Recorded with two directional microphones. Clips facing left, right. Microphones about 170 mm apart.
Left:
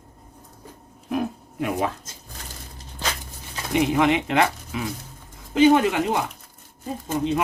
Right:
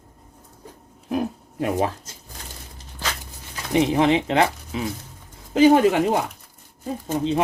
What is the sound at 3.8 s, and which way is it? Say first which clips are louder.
Speech: right 2 dB; 30° right (ahead or behind).